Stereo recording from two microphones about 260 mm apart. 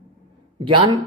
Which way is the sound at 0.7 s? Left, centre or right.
Centre.